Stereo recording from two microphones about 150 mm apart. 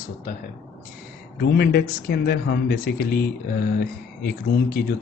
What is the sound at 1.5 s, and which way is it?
Speech, 90° left.